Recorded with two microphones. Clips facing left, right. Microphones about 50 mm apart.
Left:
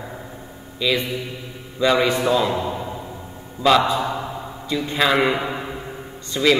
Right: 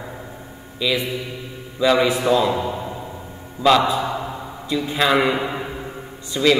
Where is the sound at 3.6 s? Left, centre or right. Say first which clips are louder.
Right 1 dB; centre.